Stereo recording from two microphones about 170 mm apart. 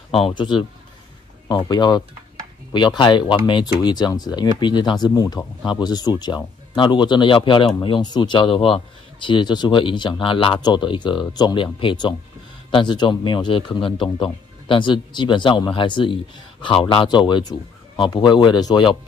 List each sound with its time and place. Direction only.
0.1 s speech: 30° left (ahead or behind)